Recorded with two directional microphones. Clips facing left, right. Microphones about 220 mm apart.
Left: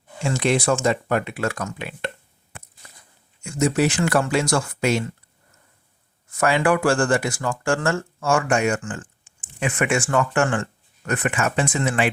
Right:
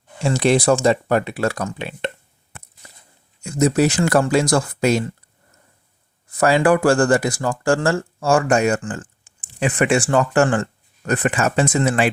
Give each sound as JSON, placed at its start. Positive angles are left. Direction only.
{"t": 0.2, "sound": "speech", "side_deg": -35}
{"t": 3.4, "sound": "speech", "side_deg": -35}
{"t": 6.3, "sound": "speech", "side_deg": -35}